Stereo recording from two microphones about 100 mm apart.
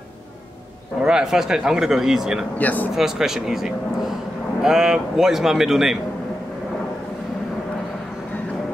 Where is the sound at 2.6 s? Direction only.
15° left (ahead or behind).